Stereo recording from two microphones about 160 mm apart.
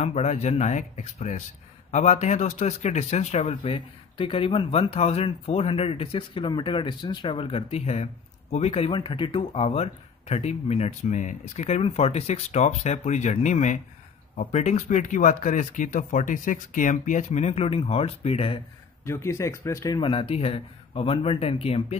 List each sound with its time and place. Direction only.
0.0 s speech: 45° left (ahead or behind)
19.0 s speech: 15° left (ahead or behind); by 21.9 s 40° left (ahead or behind)